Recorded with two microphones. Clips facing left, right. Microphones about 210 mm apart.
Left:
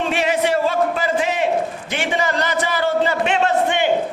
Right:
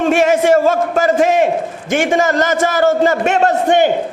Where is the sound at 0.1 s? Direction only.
45° right (ahead or behind).